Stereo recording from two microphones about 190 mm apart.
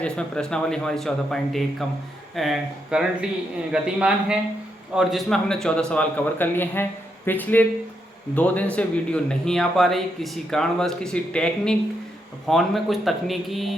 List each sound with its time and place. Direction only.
0.0 s speech: 5° left (ahead or behind)